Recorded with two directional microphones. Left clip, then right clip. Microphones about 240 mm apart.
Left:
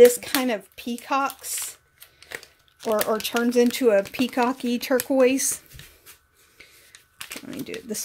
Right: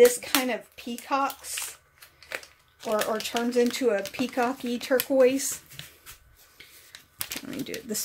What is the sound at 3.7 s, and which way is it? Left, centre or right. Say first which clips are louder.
Speech: left 6 dB; left.